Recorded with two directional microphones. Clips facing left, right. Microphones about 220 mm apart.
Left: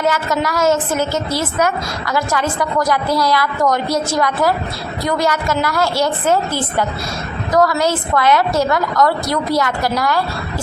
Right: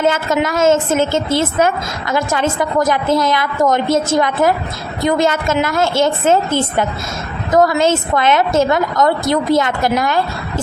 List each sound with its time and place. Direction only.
0.0 s a woman's voice: 25° right (ahead or behind)